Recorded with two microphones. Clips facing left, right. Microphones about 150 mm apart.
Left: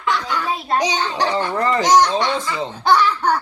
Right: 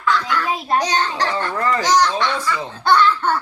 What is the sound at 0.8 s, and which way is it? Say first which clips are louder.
A child's voice: even; 20° left (ahead or behind).